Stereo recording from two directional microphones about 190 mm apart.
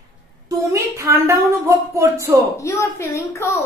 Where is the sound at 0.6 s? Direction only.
15° right (ahead or behind).